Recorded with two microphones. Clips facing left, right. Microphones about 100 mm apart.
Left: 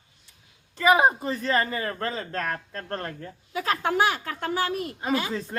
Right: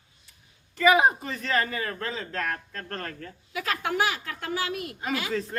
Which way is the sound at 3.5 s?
35° left (ahead or behind).